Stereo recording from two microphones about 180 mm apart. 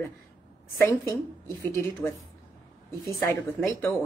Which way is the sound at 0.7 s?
15° left (ahead or behind).